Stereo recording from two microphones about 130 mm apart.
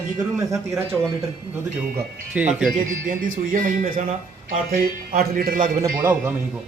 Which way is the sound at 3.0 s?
90° right.